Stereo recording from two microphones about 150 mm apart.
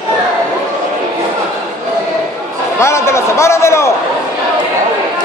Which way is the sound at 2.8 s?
20° left (ahead or behind).